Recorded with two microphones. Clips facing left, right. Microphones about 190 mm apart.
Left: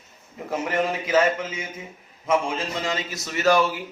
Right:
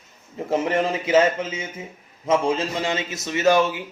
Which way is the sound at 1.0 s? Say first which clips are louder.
Right 4 dB; 25° right (ahead or behind).